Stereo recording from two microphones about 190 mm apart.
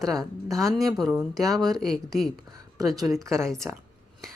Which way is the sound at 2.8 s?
15° right (ahead or behind).